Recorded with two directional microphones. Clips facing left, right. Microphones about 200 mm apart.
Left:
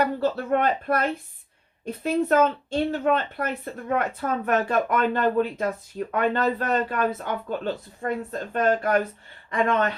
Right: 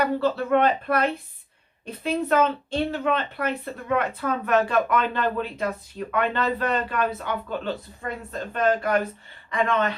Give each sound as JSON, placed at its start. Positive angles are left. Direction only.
{"t": 0.0, "sound": "speech", "side_deg": 45}